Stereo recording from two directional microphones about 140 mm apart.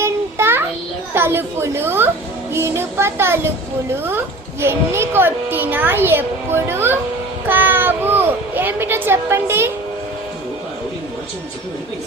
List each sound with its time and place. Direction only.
0.0 s child singing: 15° right (ahead or behind)
1.1 s a child's voice: 15° right (ahead or behind)
4.6 s a child's voice: 15° right (ahead or behind)